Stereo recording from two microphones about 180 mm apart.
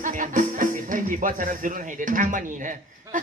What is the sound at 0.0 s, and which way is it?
A child's voice, 45° right (ahead or behind).